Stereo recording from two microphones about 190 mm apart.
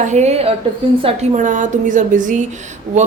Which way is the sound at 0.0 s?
35° right (ahead or behind).